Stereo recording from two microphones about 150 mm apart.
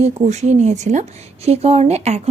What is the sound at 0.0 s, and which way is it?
A woman's voice, 50° right (ahead or behind).